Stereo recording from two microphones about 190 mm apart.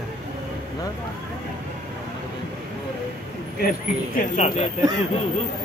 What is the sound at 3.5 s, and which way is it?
Speech, 50° left (ahead or behind).